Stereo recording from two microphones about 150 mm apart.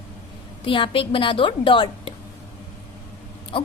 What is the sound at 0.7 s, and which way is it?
A woman's voice, 35° left (ahead or behind).